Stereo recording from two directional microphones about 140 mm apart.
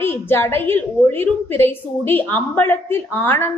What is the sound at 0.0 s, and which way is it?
A woman's voice, 15° left (ahead or behind).